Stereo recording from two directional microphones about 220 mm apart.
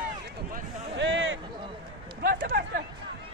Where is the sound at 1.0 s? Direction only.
55° right (ahead or behind).